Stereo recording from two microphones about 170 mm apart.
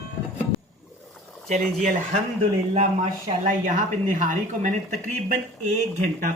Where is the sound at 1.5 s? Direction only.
45° right (ahead or behind).